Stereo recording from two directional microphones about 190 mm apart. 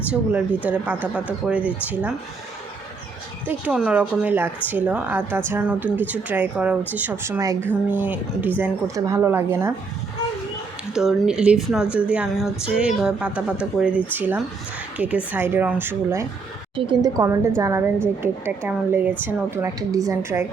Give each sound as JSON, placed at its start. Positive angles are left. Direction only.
{"t": 0.1, "sound": "speech", "side_deg": -5}
{"t": 3.4, "sound": "speech", "side_deg": -5}
{"t": 10.9, "sound": "speech", "side_deg": -5}
{"t": 16.7, "sound": "a woman's voice", "side_deg": -25}